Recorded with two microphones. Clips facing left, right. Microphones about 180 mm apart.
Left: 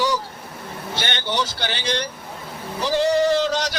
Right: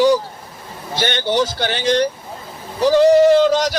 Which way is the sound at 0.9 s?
50° right (ahead or behind).